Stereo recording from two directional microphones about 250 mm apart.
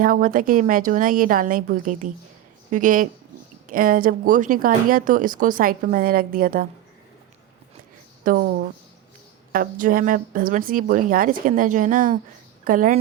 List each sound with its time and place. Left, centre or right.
0.0 s speech: right
8.2 s speech: right